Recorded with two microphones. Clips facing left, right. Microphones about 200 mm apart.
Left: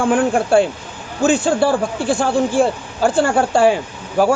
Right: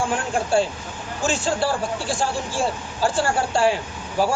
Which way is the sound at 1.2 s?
55° left (ahead or behind).